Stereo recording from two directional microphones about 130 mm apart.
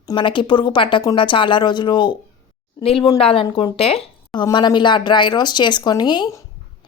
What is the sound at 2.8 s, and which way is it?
Speech, 45° left (ahead or behind).